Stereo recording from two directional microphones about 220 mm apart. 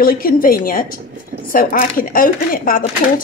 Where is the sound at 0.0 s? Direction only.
40° left (ahead or behind).